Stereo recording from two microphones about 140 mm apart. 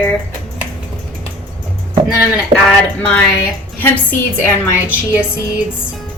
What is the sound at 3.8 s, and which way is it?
Speech, 15° left (ahead or behind).